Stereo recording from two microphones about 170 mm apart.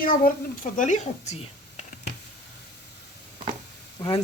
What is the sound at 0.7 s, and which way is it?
Speech, 45° left (ahead or behind).